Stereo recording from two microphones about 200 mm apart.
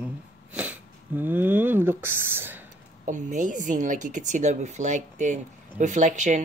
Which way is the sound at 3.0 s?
40° right (ahead or behind).